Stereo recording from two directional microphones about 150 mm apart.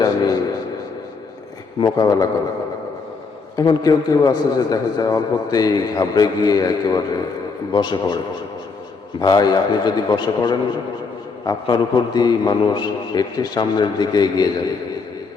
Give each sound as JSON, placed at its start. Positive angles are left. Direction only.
{"t": 1.8, "sound": "a man's voice", "side_deg": 25}
{"t": 3.5, "sound": "a man's voice", "side_deg": 25}
{"t": 9.2, "sound": "a man's voice", "side_deg": 25}